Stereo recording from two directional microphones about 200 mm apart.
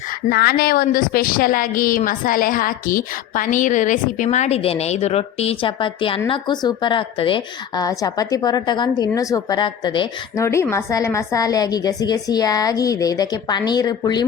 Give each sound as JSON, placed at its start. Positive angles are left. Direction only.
{"t": 0.3, "sound": "a woman's voice", "side_deg": 50}